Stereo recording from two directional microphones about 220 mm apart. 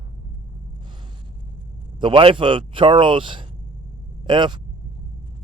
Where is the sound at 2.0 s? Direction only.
20° right (ahead or behind).